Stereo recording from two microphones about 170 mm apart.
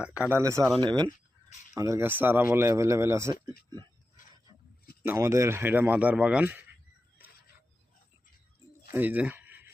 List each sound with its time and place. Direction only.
0.0 s speech: 10° right (ahead or behind)
0.8 s speech: 25° right (ahead or behind)
5.0 s speech: 15° right (ahead or behind)
8.9 s speech: 10° right (ahead or behind)